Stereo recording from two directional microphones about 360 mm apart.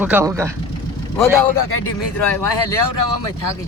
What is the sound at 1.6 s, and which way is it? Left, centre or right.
Speech, left.